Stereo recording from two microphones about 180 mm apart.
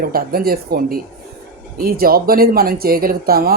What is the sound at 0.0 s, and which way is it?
A woman's voice, 55° right (ahead or behind).